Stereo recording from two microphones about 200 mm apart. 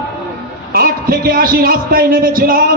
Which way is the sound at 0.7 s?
45° right (ahead or behind).